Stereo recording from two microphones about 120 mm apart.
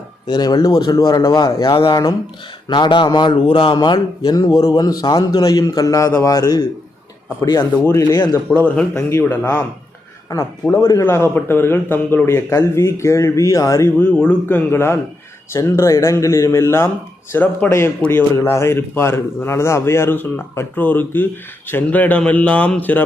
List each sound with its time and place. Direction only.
0.3 s a man's voice: 35° left (ahead or behind)
7.9 s speech: 20° left (ahead or behind)
8.4 s a man's voice: 10° left (ahead or behind)
9.0 s speech: 20° left (ahead or behind)
10.2 s speech: 30° left (ahead or behind)
11.0 s a man's voice: 20° left (ahead or behind)